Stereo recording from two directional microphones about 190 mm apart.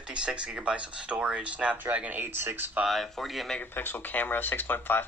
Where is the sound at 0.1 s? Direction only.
5° right (ahead or behind).